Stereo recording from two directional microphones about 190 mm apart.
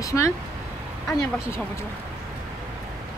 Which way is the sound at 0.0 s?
15° left (ahead or behind).